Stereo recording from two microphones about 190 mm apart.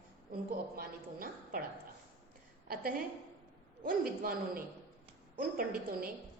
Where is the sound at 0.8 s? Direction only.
50° right (ahead or behind).